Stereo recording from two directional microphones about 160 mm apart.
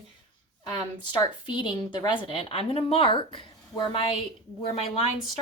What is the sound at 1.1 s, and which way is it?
A woman's voice, 30° left (ahead or behind).